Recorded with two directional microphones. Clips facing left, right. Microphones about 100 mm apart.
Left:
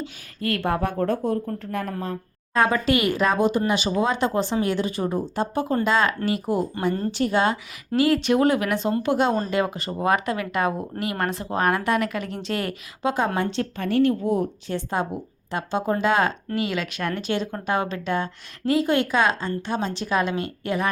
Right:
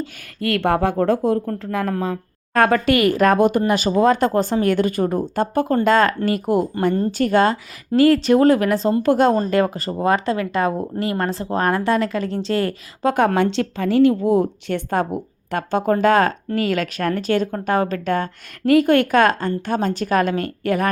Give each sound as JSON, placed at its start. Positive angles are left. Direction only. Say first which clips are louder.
{"t": 0.3, "sound": "speech", "louder": "right 5 dB", "side_deg": -70}
{"t": 2.5, "sound": "a woman's voice", "louder": "right 4 dB", "side_deg": -60}
{"t": 13.1, "sound": "a woman's voice", "louder": "right 8 dB", "side_deg": -70}